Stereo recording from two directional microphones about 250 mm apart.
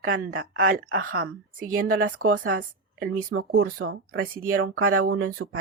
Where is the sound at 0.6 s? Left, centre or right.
Right.